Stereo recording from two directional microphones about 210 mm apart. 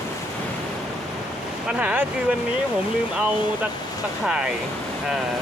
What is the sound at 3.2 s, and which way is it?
Speech, 5° right (ahead or behind).